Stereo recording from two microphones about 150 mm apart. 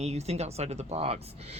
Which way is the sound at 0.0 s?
45° right (ahead or behind).